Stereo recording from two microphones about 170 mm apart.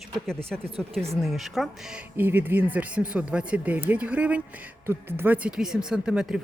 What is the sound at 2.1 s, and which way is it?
Speech, 10° right (ahead or behind).